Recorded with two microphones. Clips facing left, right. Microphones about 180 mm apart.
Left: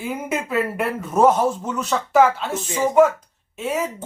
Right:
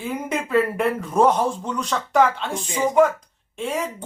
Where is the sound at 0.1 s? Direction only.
5° left (ahead or behind).